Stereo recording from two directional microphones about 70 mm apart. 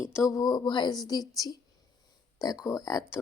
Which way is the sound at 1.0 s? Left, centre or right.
Left.